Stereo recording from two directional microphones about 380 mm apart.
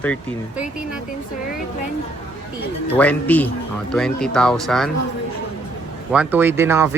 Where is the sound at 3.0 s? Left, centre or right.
Centre.